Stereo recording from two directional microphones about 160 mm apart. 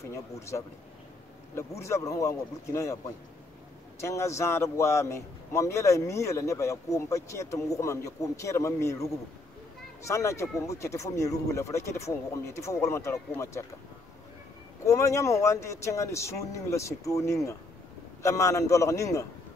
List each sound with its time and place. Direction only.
0.0 s a man's voice: 20° left (ahead or behind)
4.0 s a man's voice: 20° left (ahead or behind)
14.9 s a man's voice: 20° left (ahead or behind)